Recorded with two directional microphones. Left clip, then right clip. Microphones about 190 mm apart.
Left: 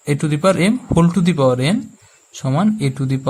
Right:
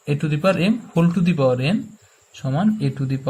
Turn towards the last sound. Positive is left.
turn(degrees=40)  # may be behind; listen again after turning